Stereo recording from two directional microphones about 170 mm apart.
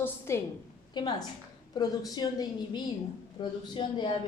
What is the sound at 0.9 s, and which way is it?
A woman's voice, 25° left (ahead or behind).